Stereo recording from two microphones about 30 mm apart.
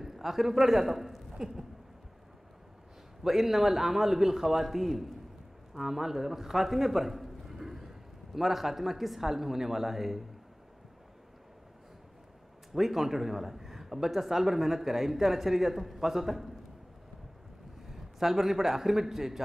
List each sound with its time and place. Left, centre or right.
0.0 s a man's voice: centre
3.3 s a man's voice: centre
12.7 s speech: centre
18.2 s speech: centre